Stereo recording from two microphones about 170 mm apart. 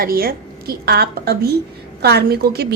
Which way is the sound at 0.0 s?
60° right (ahead or behind).